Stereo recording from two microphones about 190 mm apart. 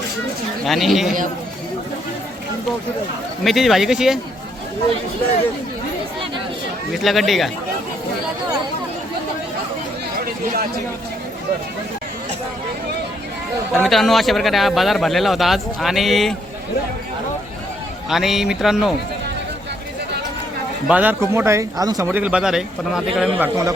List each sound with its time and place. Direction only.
0.6 s a man's voice: centre (ahead or behind)
3.4 s a man's voice: centre (ahead or behind)
6.9 s a man's voice: centre (ahead or behind)
10.2 s speech: 50° right (ahead or behind)
13.7 s a man's voice: centre (ahead or behind)
18.1 s a man's voice: centre (ahead or behind)
20.8 s speech: 10° right (ahead or behind)
23.4 s speech: 15° right (ahead or behind)